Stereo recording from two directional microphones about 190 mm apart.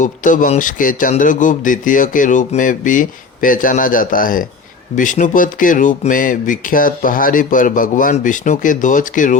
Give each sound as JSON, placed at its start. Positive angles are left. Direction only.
{"t": 0.0, "sound": "a man's voice", "side_deg": 45}